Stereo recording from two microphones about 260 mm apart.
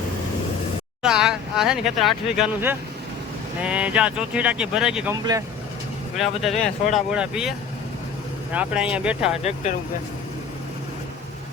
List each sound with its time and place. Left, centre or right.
1.0 s speech: centre
5.1 s speech: centre
6.1 s speech: centre
8.5 s speech: centre
9.4 s speech: left